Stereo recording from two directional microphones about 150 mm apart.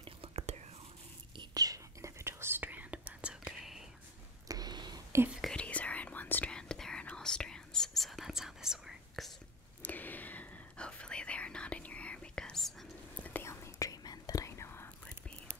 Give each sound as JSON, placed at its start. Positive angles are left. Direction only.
{"t": 0.0, "sound": "whispering", "side_deg": -40}
{"t": 1.3, "sound": "whispering", "side_deg": -30}
{"t": 4.5, "sound": "a sound", "side_deg": -25}
{"t": 5.4, "sound": "whispering", "side_deg": 5}
{"t": 9.8, "sound": "whispering", "side_deg": 10}
{"t": 13.2, "sound": "whispering", "side_deg": 15}